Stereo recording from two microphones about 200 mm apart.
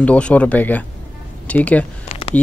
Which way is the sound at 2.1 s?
30° left (ahead or behind).